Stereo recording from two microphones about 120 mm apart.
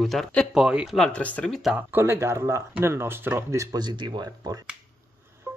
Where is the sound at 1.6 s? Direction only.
5° right (ahead or behind).